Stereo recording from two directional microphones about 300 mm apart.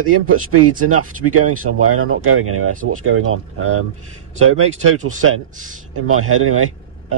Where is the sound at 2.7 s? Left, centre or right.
Right.